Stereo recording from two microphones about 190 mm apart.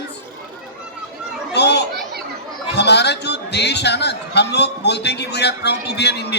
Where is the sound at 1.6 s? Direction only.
60° left (ahead or behind).